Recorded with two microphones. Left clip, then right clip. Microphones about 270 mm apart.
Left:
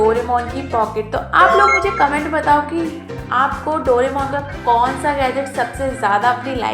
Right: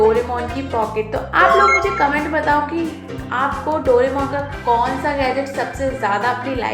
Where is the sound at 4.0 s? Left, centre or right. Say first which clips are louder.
Even; centre.